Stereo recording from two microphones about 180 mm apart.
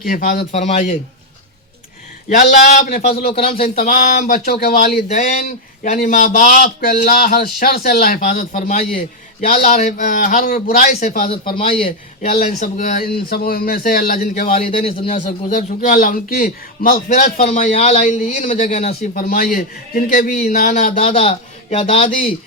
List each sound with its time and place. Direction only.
0.0 s a man's voice: 50° left (ahead or behind)
0.5 s speech: 40° left (ahead or behind)
2.3 s a man's voice: 50° left (ahead or behind); by 3.8 s 30° left (ahead or behind)
3.8 s a man's voice: 45° left (ahead or behind)
4.5 s speech: 60° left (ahead or behind)
5.0 s a man's voice: 40° left (ahead or behind)
11.3 s a man's voice: 30° left (ahead or behind)
12.3 s a man's voice: 45° left (ahead or behind)
14.5 s a man's voice: 30° left (ahead or behind)
15.1 s a man's voice: 45° left (ahead or behind)
19.1 s a man's voice: 55° left (ahead or behind); by 22.1 s 30° left (ahead or behind)